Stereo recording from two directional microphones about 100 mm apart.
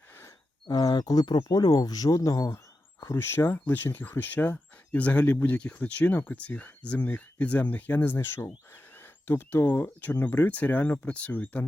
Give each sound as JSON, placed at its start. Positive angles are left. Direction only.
{"t": 0.7, "sound": "speech", "side_deg": 40}